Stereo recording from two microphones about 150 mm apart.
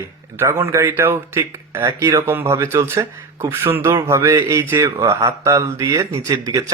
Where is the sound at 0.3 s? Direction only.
15° right (ahead or behind).